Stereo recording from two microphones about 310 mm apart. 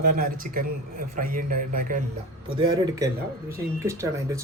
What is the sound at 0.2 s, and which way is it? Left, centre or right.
A man's voice, right.